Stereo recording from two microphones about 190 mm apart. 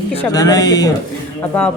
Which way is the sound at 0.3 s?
20° left (ahead or behind).